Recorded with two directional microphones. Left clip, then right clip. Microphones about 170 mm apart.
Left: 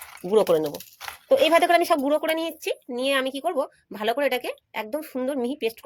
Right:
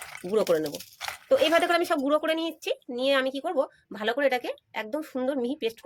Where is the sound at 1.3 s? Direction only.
25° left (ahead or behind).